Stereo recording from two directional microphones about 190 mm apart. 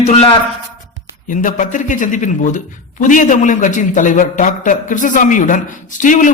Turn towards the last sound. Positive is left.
turn(degrees=40)  # may be behind; listen again after turning